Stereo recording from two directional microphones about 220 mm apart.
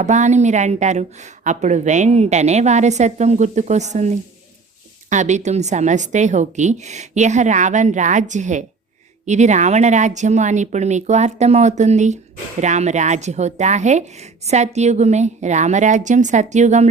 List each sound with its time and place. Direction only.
0.0 s speech: 35° right (ahead or behind)